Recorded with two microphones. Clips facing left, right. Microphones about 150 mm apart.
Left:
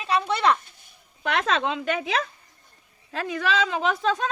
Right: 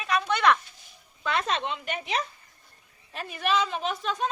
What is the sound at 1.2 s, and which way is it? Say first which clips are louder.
Speech: left 4 dB; 90° left.